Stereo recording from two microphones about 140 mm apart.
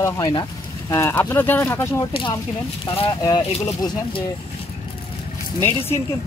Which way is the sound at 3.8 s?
40° left (ahead or behind).